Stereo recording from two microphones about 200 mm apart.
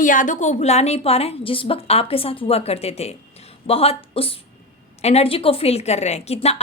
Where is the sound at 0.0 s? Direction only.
40° left (ahead or behind).